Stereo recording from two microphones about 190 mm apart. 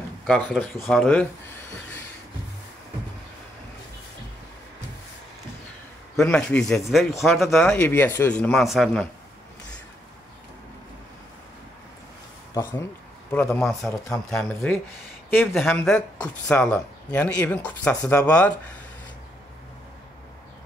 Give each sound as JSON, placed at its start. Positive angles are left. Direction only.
{"t": 0.3, "sound": "speech", "side_deg": 0}
{"t": 6.2, "sound": "speech", "side_deg": 5}
{"t": 12.6, "sound": "speech", "side_deg": 15}